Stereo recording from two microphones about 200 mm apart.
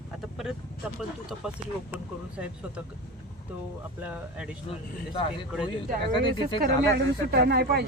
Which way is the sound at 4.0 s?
5° right (ahead or behind).